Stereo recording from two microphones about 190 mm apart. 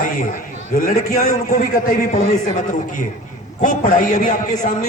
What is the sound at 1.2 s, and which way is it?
A man's voice, 35° left (ahead or behind).